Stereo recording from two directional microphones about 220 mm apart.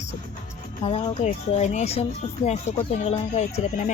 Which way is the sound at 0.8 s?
25° left (ahead or behind).